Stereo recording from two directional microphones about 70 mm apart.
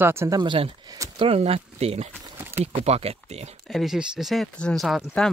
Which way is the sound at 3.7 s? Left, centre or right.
Centre.